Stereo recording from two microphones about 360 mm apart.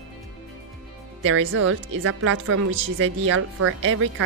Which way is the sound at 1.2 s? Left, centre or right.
Right.